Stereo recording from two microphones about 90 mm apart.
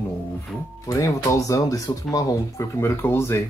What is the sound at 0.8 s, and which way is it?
Speech, 40° left (ahead or behind).